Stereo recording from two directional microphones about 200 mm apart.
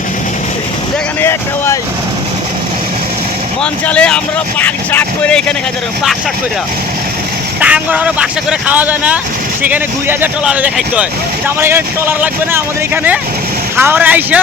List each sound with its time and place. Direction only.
1.2 s vehicle: 15° left (ahead or behind)
3.6 s speech: 5° left (ahead or behind)
7.6 s speech: 5° right (ahead or behind)